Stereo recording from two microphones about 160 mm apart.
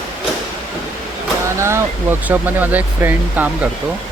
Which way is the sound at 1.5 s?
15° right (ahead or behind).